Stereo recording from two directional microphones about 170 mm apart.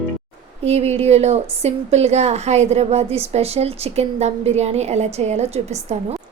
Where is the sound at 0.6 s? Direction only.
40° right (ahead or behind).